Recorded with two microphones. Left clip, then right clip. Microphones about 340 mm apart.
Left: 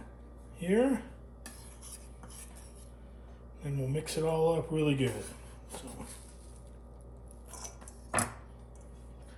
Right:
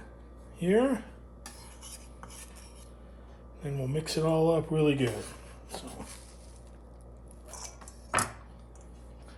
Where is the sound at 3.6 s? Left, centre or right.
Right.